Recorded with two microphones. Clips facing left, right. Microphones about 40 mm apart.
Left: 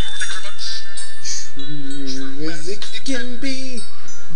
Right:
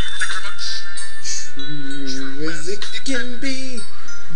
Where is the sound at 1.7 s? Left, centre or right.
Right.